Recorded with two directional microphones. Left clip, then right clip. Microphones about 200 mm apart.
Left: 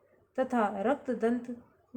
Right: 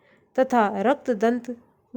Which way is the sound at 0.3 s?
50° right (ahead or behind).